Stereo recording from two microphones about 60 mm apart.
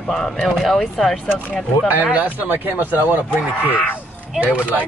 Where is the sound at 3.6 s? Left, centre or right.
Left.